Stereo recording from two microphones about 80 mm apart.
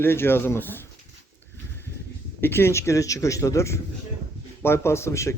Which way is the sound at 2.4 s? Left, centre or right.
Left.